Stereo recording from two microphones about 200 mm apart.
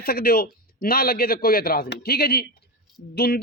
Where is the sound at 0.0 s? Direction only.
50° left (ahead or behind).